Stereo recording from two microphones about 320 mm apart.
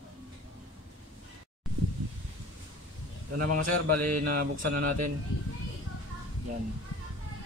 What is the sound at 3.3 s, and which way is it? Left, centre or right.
Speech, right.